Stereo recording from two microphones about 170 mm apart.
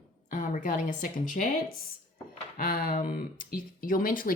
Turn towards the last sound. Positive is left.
turn(degrees=55)  # may be behind; listen again after turning